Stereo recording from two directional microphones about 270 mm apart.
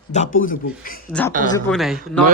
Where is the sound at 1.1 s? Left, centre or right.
Centre.